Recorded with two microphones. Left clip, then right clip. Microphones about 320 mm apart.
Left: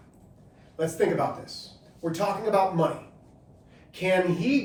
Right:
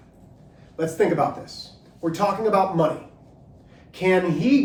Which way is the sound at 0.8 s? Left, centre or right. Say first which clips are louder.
Right 3 dB; right.